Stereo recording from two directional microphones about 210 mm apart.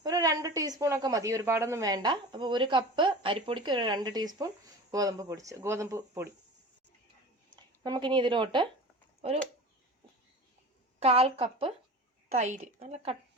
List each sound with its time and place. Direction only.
0.0 s speech: 15° right (ahead or behind)
7.5 s speech: 20° right (ahead or behind)
11.0 s a woman's voice: 25° right (ahead or behind)